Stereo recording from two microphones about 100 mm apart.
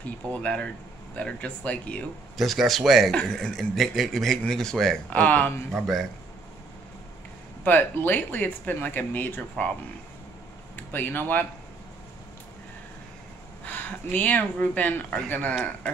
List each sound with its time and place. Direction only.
0.0 s speech: 10° left (ahead or behind)
2.3 s speech: centre (ahead or behind)
5.1 s speech: 15° left (ahead or behind)
5.7 s speech: centre (ahead or behind)
7.6 s speech: 20° left (ahead or behind)
10.8 s speech: 20° left (ahead or behind)
13.7 s speech: 15° left (ahead or behind)